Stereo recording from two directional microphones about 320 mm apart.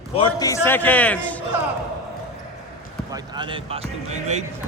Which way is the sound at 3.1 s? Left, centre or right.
Centre.